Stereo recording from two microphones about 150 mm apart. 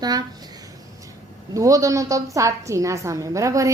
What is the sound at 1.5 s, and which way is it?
A woman's voice, 20° right (ahead or behind).